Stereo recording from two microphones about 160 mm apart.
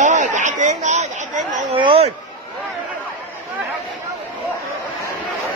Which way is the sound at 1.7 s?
35° right (ahead or behind).